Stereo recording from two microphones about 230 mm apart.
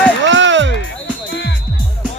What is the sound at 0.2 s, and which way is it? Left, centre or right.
Music, right.